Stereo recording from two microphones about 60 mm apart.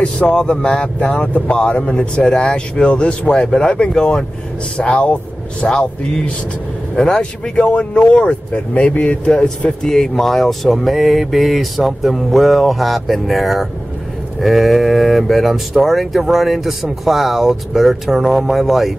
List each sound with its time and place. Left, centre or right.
0.0 s speech: centre